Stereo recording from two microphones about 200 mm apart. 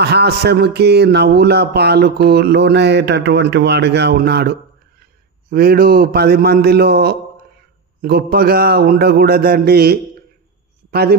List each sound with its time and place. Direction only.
0.0 s speech: 55° right (ahead or behind)